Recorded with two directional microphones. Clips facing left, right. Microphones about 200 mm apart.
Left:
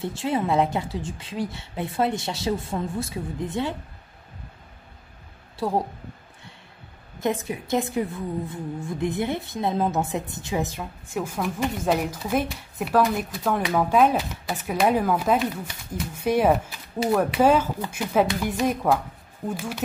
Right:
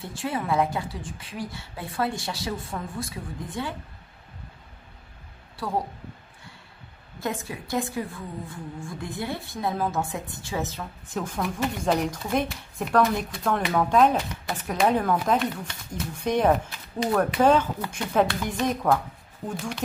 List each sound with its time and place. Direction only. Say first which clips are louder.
0.0 s a woman's voice: left 5 dB; 25° left (ahead or behind)
5.6 s a woman's voice: left 5 dB; 25° left (ahead or behind)
7.2 s a woman's voice: left 5 dB; 20° left (ahead or behind)